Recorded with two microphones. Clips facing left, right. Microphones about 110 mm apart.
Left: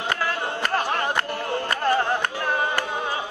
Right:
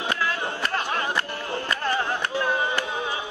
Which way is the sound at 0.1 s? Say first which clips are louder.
Left 2 dB; 45° left (ahead or behind).